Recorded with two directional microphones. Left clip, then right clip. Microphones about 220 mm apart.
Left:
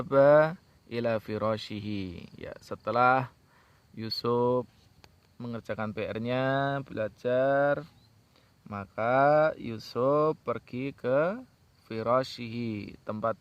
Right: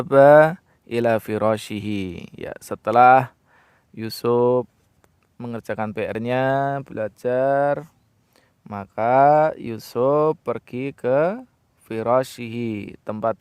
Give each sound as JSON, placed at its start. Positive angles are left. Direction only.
{"t": 0.0, "sound": "speech", "side_deg": -40}